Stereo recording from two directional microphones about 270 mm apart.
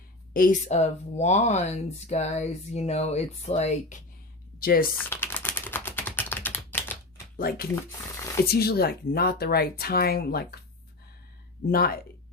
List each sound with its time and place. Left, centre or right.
0.3 s speech: left
5.0 s typing: centre
7.3 s speech: left
11.7 s speech: left